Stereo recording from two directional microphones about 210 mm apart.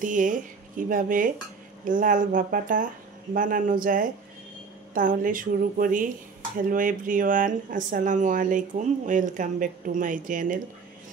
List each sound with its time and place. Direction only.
0.0 s speech: 40° right (ahead or behind)